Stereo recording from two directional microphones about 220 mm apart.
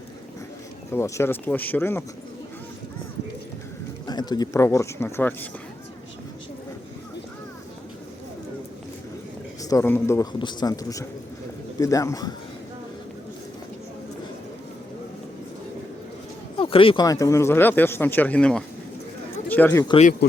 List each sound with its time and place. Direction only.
0.9 s speech: 15° left (ahead or behind)
4.0 s speech: 20° left (ahead or behind)
9.6 s speech: 10° left (ahead or behind)
16.6 s speech: 25° left (ahead or behind); by 19.8 s 10° left (ahead or behind)
19.8 s speech: 20° left (ahead or behind)